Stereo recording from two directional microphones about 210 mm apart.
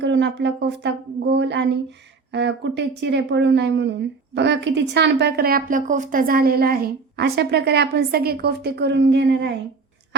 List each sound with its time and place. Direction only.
0.0 s speech: 55° right (ahead or behind)